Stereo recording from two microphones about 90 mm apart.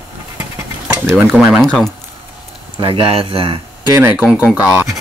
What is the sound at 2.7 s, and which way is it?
Speech, 65° right (ahead or behind).